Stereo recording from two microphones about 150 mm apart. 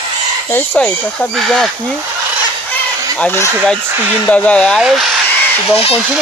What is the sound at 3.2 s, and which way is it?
Speech, 15° left (ahead or behind).